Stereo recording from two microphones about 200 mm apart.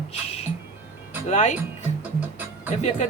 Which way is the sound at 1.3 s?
35° left (ahead or behind).